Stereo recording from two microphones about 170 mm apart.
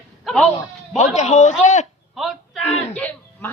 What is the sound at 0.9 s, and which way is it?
Speech, 40° left (ahead or behind).